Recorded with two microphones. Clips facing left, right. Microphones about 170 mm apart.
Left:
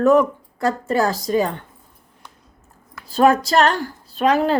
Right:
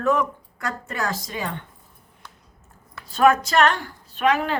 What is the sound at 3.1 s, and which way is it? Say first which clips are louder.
A woman's voice: left 3 dB; 35° left (ahead or behind).